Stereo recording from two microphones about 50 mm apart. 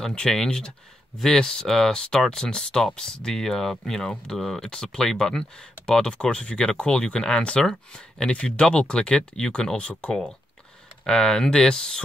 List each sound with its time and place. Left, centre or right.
0.0 s speech: centre